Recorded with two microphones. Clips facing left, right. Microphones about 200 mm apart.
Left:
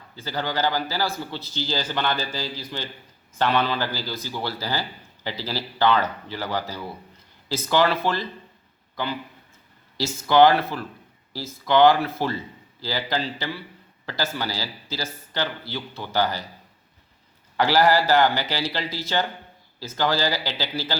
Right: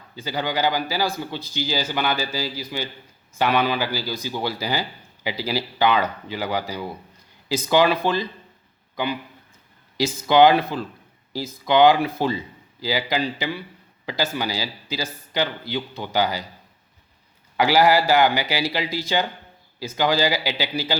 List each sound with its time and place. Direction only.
0.2 s speech: 15° right (ahead or behind)
10.0 s speech: 15° right (ahead or behind)
17.6 s speech: 10° right (ahead or behind)